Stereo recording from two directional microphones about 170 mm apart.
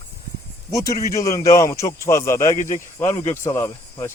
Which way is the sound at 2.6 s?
50° left (ahead or behind).